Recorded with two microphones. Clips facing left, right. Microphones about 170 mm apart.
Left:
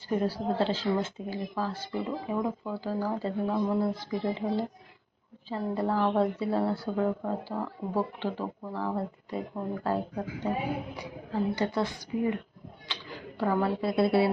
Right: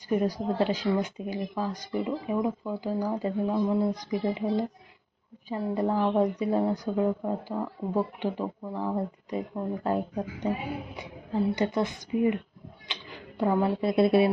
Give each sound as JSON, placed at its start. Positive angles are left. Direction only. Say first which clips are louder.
{"t": 0.1, "sound": "a woman's voice", "louder": "right 2 dB", "side_deg": -15}